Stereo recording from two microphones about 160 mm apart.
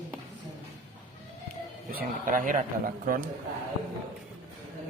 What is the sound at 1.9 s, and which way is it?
A man's voice, 60° right (ahead or behind).